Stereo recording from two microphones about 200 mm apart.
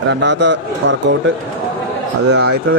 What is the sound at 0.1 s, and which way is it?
A man's voice, 60° right (ahead or behind).